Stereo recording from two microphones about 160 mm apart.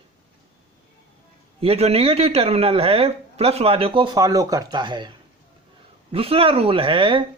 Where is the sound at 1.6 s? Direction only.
40° right (ahead or behind).